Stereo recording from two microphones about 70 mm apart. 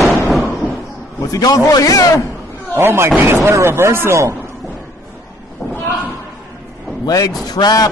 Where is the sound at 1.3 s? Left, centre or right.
Left.